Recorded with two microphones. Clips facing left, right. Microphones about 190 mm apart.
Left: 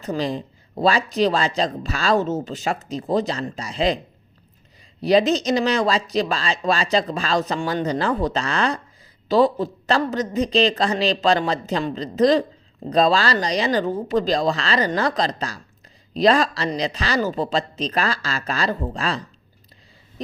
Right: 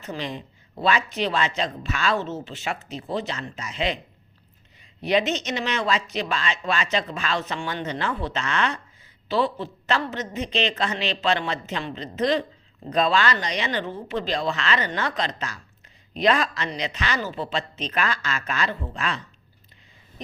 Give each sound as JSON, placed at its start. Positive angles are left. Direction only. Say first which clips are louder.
{"t": 0.0, "sound": "speech", "louder": "left 7 dB", "side_deg": 35}